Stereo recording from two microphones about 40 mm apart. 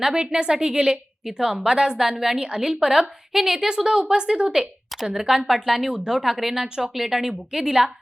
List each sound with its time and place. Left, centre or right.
0.0 s speech: centre
1.2 s a woman's voice: centre
1.5 s a woman's voice: centre
5.6 s a woman's voice: centre